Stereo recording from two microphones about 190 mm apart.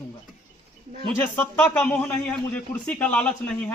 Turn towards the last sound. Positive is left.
turn(degrees=5)  # may be behind; listen again after turning